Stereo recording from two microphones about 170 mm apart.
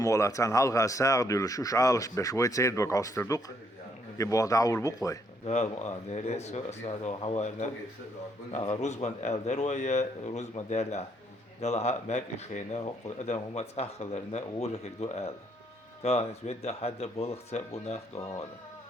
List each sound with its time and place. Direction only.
0.0 s speech: 20° left (ahead or behind)
5.5 s speech: 40° left (ahead or behind)